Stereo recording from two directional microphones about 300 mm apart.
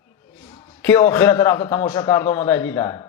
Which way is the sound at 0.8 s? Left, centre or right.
Centre.